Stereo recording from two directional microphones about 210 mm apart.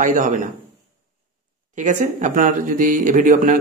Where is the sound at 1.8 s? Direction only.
35° right (ahead or behind).